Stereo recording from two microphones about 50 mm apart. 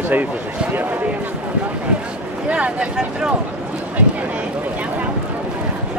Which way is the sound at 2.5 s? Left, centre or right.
Right.